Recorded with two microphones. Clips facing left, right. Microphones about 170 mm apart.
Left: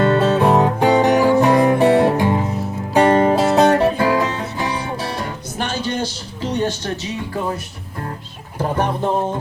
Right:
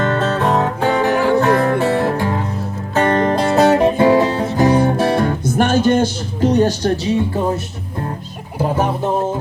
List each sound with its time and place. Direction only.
0.1 s music: 10° left (ahead or behind)
3.8 s music: 20° right (ahead or behind)
8.5 s speech: 10° right (ahead or behind)